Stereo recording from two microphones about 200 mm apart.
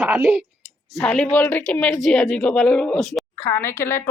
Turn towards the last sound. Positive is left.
turn(degrees=10)  # may be behind; listen again after turning